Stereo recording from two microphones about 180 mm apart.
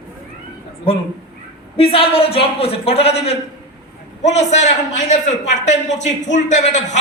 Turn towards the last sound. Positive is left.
turn(degrees=40)  # may be behind; listen again after turning